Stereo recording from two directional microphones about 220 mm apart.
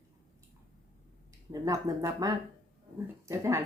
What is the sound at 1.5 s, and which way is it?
Speech, 15° right (ahead or behind).